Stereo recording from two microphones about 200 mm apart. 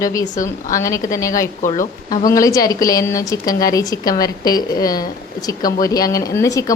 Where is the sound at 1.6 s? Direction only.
40° left (ahead or behind).